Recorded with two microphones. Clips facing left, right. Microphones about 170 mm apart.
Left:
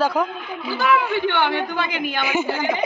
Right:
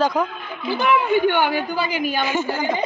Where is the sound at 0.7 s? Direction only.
15° right (ahead or behind).